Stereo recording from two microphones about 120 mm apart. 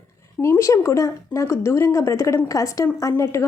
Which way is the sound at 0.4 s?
25° left (ahead or behind).